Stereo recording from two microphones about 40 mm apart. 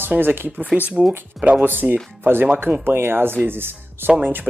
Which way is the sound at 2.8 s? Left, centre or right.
Right.